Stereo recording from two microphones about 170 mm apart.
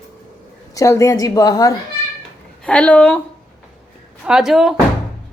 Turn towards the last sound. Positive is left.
turn(degrees=0)  # may be behind; listen again after turning